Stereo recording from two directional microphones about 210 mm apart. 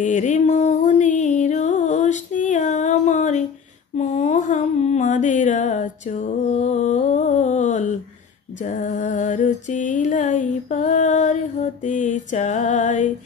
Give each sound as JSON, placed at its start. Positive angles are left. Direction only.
{"t": 0.0, "sound": "music", "side_deg": 35}
{"t": 3.9, "sound": "a sound", "side_deg": 35}
{"t": 8.6, "sound": "music", "side_deg": 35}